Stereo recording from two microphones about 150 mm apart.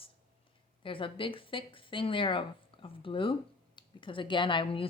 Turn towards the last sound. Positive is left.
turn(degrees=35)  # may be behind; listen again after turning